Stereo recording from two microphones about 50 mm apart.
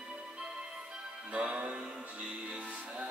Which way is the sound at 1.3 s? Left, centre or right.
Right.